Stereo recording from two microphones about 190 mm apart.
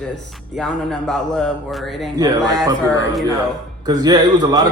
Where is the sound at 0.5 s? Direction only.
Centre (ahead or behind).